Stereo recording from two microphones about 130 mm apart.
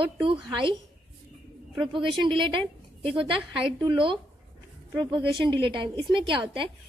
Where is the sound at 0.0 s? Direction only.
40° right (ahead or behind).